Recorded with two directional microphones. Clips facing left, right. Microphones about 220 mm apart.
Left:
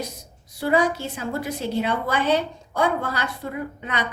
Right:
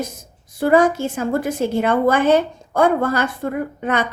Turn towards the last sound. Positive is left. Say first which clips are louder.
# right 8 dB
turn(degrees=-50)  # may be behind; listen again after turning